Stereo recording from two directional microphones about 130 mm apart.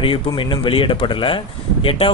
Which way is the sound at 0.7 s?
40° left (ahead or behind).